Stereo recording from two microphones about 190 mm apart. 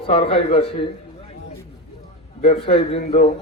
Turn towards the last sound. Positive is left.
turn(degrees=35)  # may be behind; listen again after turning